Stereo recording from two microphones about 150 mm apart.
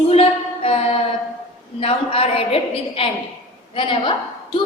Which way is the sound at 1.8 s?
40° left (ahead or behind).